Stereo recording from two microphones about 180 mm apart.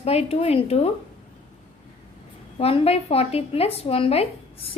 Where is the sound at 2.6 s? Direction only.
35° left (ahead or behind).